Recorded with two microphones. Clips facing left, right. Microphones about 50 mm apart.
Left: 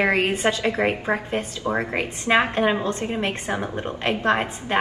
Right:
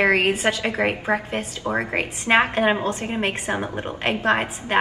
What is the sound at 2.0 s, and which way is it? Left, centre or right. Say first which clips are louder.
A woman's voice: right 2 dB; right.